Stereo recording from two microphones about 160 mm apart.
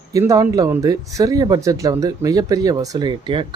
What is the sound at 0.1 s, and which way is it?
Speech, 20° right (ahead or behind).